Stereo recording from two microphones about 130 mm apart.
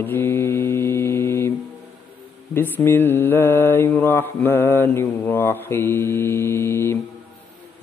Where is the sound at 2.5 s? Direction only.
15° left (ahead or behind).